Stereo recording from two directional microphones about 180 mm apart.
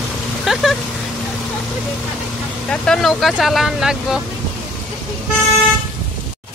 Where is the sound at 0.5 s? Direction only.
Centre (ahead or behind).